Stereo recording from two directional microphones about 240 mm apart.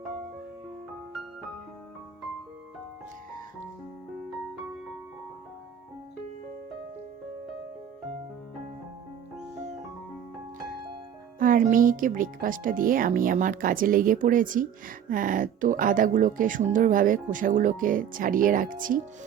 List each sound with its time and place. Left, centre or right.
11.3 s speech: right